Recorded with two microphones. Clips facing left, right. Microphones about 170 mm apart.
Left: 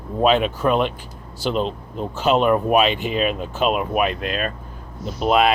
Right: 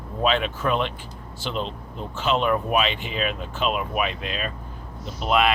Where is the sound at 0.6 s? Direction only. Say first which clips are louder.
Left 5 dB; 45° left (ahead or behind).